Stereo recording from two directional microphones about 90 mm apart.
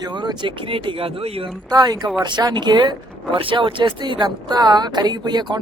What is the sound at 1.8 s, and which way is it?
Speech, 50° right (ahead or behind).